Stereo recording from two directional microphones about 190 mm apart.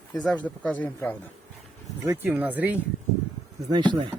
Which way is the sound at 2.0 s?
15° right (ahead or behind).